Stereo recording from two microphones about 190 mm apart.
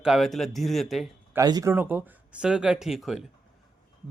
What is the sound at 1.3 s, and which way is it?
A man's voice, 20° right (ahead or behind).